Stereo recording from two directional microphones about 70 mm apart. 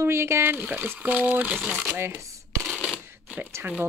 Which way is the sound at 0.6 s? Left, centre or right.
Right.